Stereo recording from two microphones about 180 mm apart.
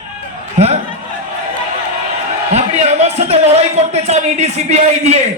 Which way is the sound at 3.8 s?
40° right (ahead or behind).